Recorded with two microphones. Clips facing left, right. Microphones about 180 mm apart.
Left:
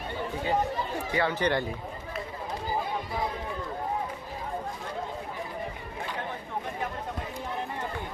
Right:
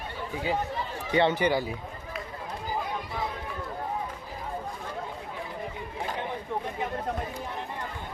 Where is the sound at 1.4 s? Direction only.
5° right (ahead or behind).